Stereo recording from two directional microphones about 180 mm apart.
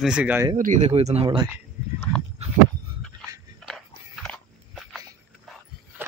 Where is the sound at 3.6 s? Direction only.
Centre (ahead or behind).